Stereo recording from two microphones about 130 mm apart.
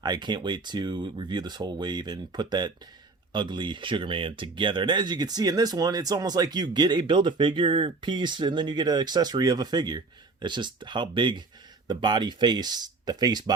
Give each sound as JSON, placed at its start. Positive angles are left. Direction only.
{"t": 0.0, "sound": "speech", "side_deg": -35}